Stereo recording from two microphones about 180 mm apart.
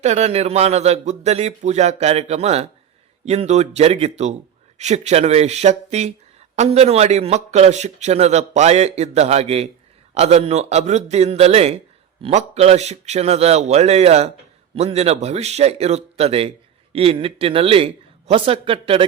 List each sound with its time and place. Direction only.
0.0 s a man's voice: 40° right (ahead or behind)